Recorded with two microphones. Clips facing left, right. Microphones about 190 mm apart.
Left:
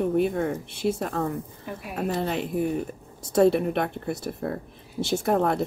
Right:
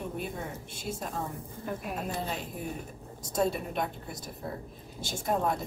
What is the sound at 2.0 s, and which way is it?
Speech, 70° left (ahead or behind).